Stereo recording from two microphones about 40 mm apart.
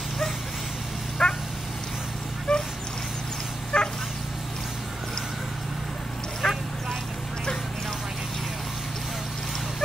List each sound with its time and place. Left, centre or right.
1.2 s dog: centre
2.5 s dog: centre
3.7 s dog: left
6.4 s a sound: centre